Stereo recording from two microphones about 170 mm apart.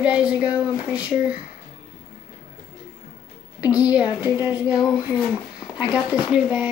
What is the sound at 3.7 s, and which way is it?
Speech, 10° right (ahead or behind).